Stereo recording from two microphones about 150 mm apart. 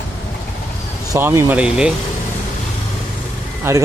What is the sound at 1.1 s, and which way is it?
Speech, 15° right (ahead or behind).